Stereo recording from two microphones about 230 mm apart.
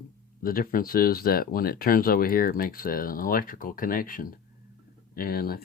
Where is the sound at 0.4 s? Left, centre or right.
Left.